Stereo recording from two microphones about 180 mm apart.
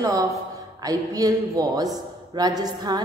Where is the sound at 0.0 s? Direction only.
20° right (ahead or behind).